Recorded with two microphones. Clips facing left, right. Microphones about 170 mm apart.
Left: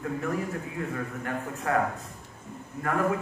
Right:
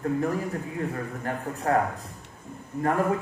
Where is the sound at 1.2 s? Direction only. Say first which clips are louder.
Right 5 dB; 35° right (ahead or behind).